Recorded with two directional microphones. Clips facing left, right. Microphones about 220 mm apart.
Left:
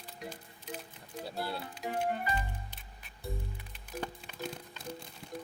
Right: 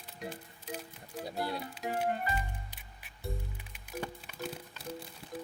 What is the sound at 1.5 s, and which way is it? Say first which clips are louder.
Speech: right 1 dB; centre (ahead or behind).